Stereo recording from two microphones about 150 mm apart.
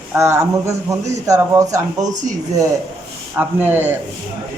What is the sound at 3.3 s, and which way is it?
Speech, 10° right (ahead or behind).